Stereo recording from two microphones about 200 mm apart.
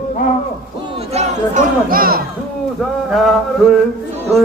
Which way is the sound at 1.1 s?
35° right (ahead or behind).